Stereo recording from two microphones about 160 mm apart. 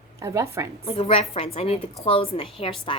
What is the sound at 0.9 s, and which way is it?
A woman's voice, 35° left (ahead or behind).